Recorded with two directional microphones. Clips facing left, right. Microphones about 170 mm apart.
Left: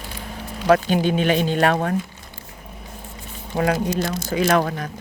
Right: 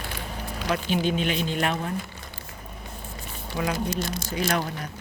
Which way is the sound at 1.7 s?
65° left (ahead or behind).